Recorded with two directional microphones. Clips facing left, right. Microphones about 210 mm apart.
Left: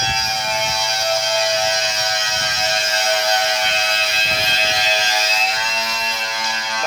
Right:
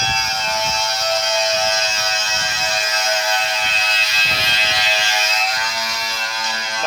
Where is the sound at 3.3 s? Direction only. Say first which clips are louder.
Left 3 dB; 50° left (ahead or behind); by 6.4 s 20° left (ahead or behind).